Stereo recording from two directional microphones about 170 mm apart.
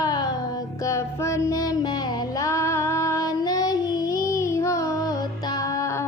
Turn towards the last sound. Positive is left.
turn(degrees=15)  # may be behind; listen again after turning